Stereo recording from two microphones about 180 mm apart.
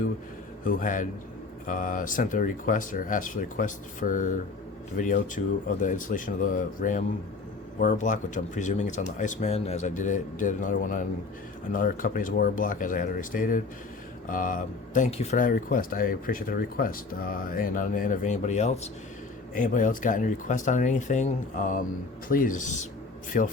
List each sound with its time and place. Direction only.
0.6 s speech: 50° left (ahead or behind)